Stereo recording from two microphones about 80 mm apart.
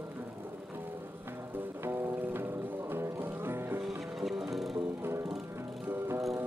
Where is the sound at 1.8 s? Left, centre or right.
Right.